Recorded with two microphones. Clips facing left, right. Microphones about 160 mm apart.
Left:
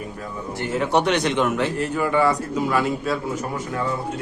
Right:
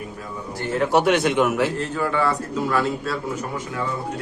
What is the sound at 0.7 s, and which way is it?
A man's voice, centre (ahead or behind).